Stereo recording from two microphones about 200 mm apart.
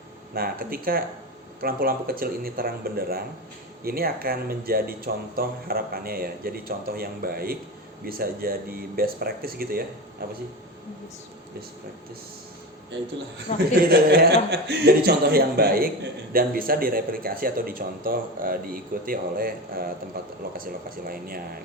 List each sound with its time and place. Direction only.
0.3 s speech: 45° right (ahead or behind)
13.5 s a man's voice: 35° left (ahead or behind)
14.1 s speech: 55° right (ahead or behind)
21.1 s speech: 45° right (ahead or behind)